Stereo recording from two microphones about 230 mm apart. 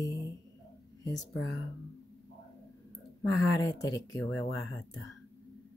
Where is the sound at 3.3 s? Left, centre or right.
Centre.